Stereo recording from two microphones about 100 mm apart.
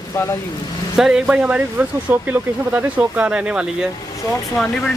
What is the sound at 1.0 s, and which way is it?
Speech, 5° right (ahead or behind).